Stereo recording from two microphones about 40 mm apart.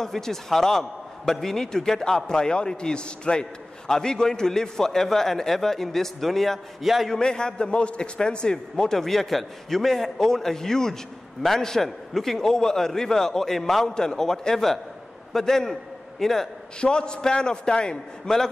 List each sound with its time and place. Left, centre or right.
0.0 s a man's voice: centre
7.1 s a man's voice: centre
16.8 s a man's voice: left